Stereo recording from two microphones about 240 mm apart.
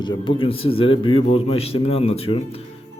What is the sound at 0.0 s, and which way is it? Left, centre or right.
Speech, centre.